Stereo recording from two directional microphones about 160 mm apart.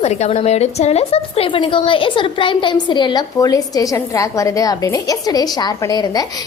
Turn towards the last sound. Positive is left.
turn(degrees=25)  # may be behind; listen again after turning